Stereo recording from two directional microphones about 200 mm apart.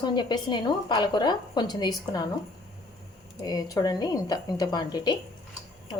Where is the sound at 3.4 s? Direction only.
20° left (ahead or behind).